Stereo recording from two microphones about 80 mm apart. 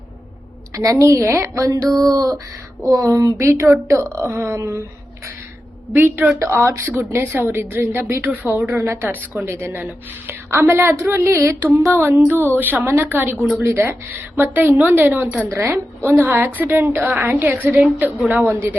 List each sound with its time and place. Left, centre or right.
0.7 s a woman's voice: right
2.0 s a woman's voice: right
5.9 s a woman's voice: right
6.4 s a woman's voice: right
6.8 s a woman's voice: right
8.6 s a woman's voice: right
15.4 s a woman's voice: right
15.7 s a woman's voice: right